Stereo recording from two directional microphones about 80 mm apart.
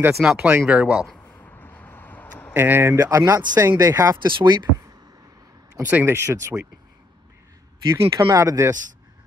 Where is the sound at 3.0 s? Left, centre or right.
Right.